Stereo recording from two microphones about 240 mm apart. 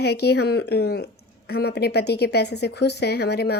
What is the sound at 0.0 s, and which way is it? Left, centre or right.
Speech, left.